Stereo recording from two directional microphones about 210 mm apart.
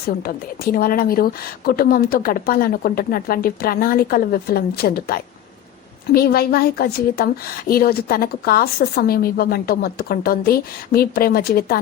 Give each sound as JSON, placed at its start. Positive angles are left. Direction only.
{"t": 0.2, "sound": "a woman's voice", "side_deg": 45}